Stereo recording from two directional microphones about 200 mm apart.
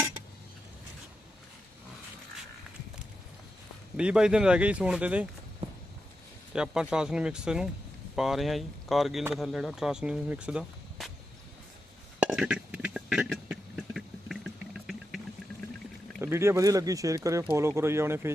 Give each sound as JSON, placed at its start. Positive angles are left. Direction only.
{"t": 3.9, "sound": "speech", "side_deg": -5}
{"t": 6.5, "sound": "speech", "side_deg": -5}
{"t": 12.2, "sound": "a sound", "side_deg": -5}
{"t": 16.2, "sound": "speech", "side_deg": -15}